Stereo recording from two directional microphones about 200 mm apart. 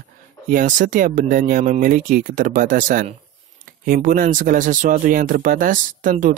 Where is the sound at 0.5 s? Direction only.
40° right (ahead or behind).